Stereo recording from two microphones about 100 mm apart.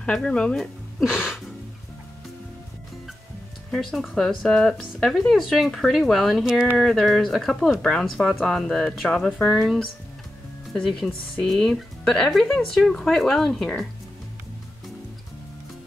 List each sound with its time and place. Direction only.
0.0 s speech: 10° left (ahead or behind)
3.7 s speech: centre (ahead or behind)